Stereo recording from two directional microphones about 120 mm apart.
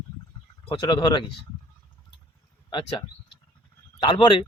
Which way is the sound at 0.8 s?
35° left (ahead or behind).